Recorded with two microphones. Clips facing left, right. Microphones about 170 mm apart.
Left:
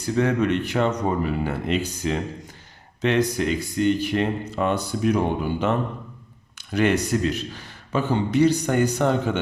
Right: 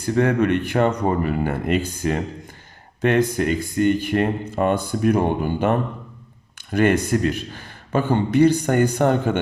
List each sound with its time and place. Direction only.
0.2 s speech: 55° right (ahead or behind)